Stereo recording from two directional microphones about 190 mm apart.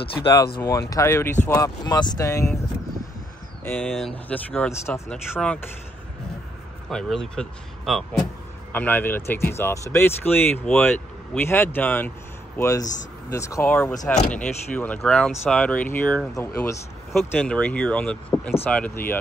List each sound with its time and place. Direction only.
0.0 s speech: 30° left (ahead or behind)
0.6 s speech: 15° left (ahead or behind)
3.6 s speech: centre (ahead or behind)
6.9 s speech: 5° left (ahead or behind)